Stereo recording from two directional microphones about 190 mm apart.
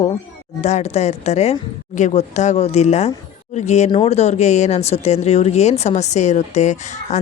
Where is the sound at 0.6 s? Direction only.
35° left (ahead or behind).